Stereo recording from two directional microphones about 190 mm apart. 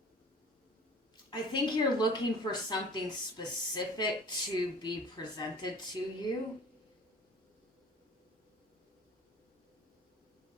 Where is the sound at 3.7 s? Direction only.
25° left (ahead or behind).